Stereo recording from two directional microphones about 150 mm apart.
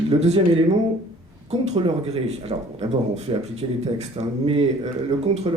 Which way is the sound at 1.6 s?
40° right (ahead or behind).